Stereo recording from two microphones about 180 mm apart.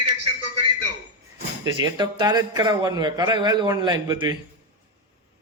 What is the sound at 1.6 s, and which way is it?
A man's voice, 25° right (ahead or behind).